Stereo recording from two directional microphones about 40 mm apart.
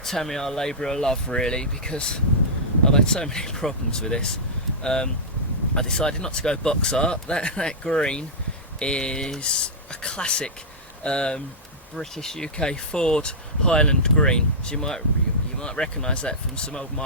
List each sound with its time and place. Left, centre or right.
0.0 s speech: centre; by 16.8 s left